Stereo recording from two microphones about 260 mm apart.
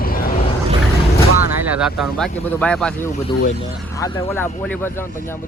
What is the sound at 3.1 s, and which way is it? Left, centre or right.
Speech, left.